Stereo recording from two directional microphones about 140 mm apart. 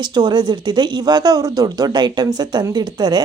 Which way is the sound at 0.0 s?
30° right (ahead or behind).